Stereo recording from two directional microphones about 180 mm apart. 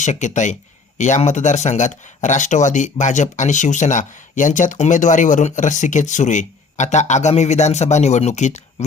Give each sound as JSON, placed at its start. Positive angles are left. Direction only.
{"t": 0.0, "sound": "speech", "side_deg": 40}